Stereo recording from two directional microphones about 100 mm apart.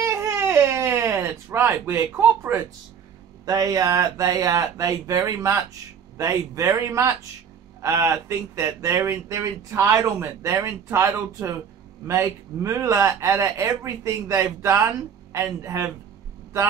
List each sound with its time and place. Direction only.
0.0 s baby cry: 25° right (ahead or behind)
3.4 s speech: 40° right (ahead or behind)
10.1 s speech: 25° right (ahead or behind)